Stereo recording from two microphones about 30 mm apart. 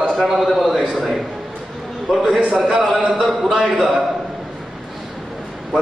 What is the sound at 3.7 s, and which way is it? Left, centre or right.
Speech, centre.